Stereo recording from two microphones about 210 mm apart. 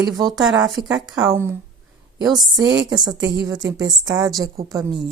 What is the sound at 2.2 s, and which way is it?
Speech, centre (ahead or behind).